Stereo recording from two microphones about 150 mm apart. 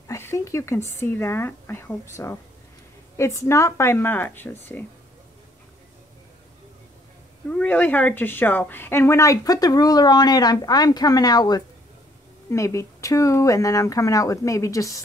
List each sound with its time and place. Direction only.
0.1 s a sound: 20° left (ahead or behind)
0.9 s speech: 15° left (ahead or behind)
7.4 s speech: 10° left (ahead or behind)